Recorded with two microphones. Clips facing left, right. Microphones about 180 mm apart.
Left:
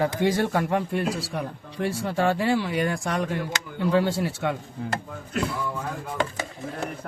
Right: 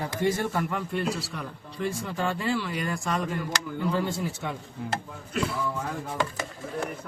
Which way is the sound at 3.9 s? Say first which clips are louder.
Left 6 dB; 85° left.